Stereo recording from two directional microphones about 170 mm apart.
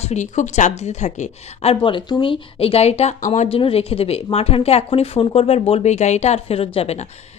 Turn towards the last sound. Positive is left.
turn(degrees=40)  # may be behind; listen again after turning